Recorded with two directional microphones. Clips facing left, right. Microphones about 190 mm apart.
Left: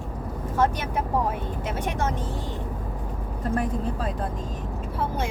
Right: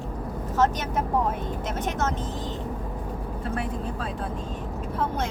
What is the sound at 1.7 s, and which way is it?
Speech, 10° left (ahead or behind).